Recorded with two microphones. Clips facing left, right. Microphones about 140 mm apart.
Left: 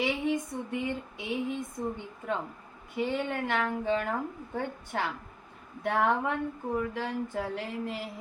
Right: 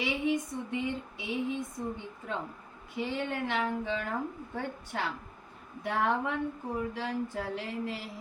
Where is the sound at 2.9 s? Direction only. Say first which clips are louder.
Left 3 dB; 55° left (ahead or behind).